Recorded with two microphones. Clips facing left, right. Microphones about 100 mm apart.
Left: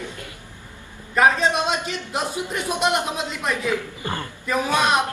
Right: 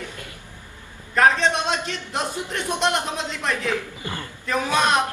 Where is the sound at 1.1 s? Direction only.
5° left (ahead or behind).